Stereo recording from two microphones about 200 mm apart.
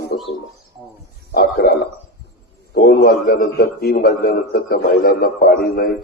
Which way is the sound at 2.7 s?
50° left (ahead or behind).